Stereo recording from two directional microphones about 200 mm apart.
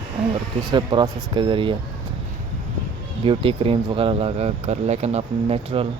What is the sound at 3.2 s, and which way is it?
Speech, 25° right (ahead or behind).